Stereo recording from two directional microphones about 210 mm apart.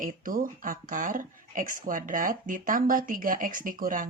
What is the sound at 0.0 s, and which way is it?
Speech, 40° right (ahead or behind).